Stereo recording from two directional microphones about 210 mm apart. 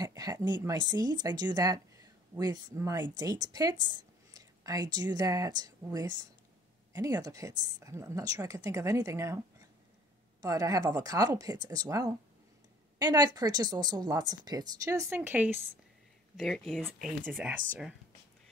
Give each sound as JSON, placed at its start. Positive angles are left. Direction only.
{"t": 0.0, "sound": "speech", "side_deg": -20}
{"t": 10.4, "sound": "speech", "side_deg": -15}
{"t": 16.3, "sound": "speech", "side_deg": 0}